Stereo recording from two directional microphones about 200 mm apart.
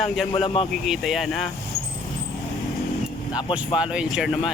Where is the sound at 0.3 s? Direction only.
25° left (ahead or behind).